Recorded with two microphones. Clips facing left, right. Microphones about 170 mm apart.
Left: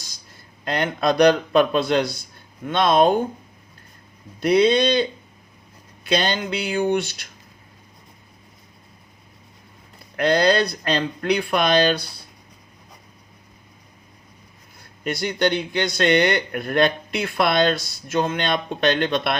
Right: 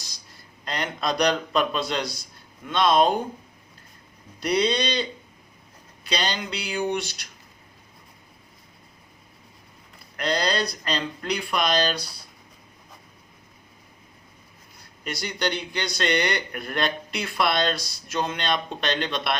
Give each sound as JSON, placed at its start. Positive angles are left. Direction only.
{"t": 0.6, "sound": "a man's voice", "side_deg": 55}
{"t": 4.4, "sound": "speech", "side_deg": 50}
{"t": 6.1, "sound": "speech", "side_deg": 50}
{"t": 10.2, "sound": "a man's voice", "side_deg": 55}
{"t": 15.0, "sound": "speech", "side_deg": 55}